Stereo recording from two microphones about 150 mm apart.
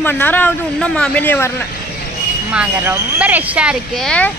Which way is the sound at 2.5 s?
10° right (ahead or behind).